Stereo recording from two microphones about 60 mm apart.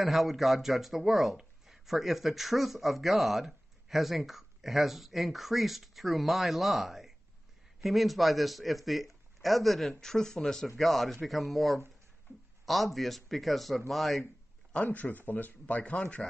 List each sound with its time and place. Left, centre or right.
0.0 s speech: centre
14.2 s a man's voice: left